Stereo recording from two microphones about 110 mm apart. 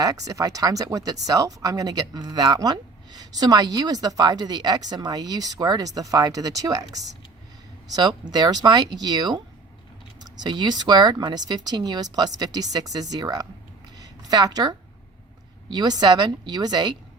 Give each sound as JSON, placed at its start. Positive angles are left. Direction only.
{"t": 0.0, "sound": "speech", "side_deg": -30}
{"t": 13.9, "sound": "a sound", "side_deg": -35}
{"t": 15.7, "sound": "speech", "side_deg": -40}